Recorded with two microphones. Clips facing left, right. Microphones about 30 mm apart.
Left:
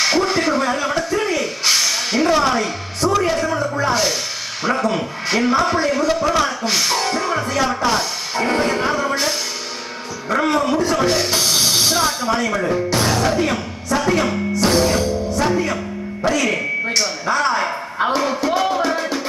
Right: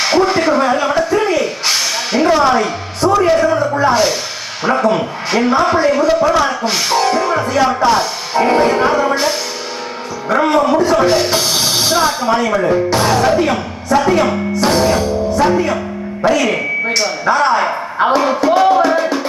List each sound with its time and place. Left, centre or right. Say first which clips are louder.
0.0 s a sound: right 4 dB; centre
3.4 s speech: right 6 dB; centre
10.3 s speech: right 5 dB; centre
18.9 s music: right 6 dB; centre